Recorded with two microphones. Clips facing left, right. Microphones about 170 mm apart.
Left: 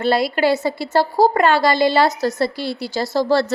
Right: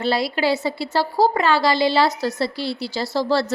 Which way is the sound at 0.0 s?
55° left (ahead or behind).